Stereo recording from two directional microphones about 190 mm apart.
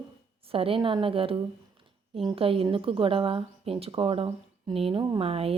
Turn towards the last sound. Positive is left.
turn(degrees=-30)  # may be behind; listen again after turning